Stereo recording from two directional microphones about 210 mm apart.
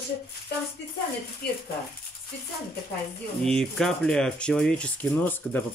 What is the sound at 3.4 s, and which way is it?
Speech, 5° left (ahead or behind).